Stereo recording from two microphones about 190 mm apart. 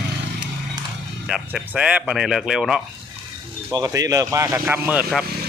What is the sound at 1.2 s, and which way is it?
Speech, 5° right (ahead or behind).